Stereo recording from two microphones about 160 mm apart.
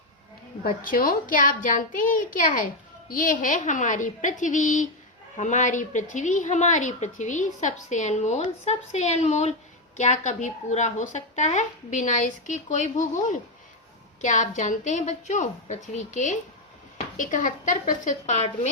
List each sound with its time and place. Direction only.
0.6 s a child's voice: 65° left (ahead or behind)
14.2 s a woman's voice: 50° left (ahead or behind)